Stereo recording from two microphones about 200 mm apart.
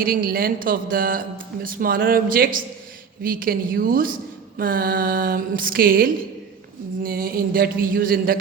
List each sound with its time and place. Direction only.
0.0 s speech: 45° right (ahead or behind)